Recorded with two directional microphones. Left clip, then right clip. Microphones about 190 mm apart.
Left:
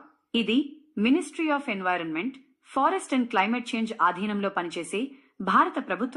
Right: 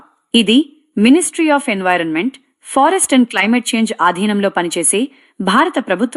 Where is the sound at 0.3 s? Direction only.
50° right (ahead or behind).